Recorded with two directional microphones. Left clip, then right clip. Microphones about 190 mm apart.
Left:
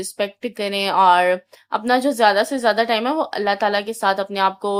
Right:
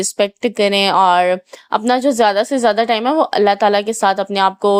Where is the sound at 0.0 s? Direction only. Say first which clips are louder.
Right 7 dB; 40° right (ahead or behind).